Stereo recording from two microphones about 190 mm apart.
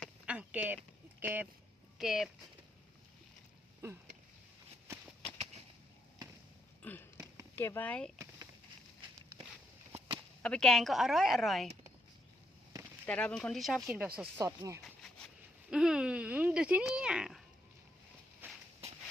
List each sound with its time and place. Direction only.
0.3 s a sound: 5° right (ahead or behind)
1.2 s speech: 10° right (ahead or behind)
6.8 s a sound: 10° left (ahead or behind)
7.5 s speech: 10° left (ahead or behind)
10.4 s speech: 5° left (ahead or behind)
13.1 s speech: 5° left (ahead or behind)
14.2 s speech: 15° right (ahead or behind)
14.8 s a sound: 5° left (ahead or behind)
15.7 s speech: 5° right (ahead or behind)
18.4 s walk: 10° right (ahead or behind)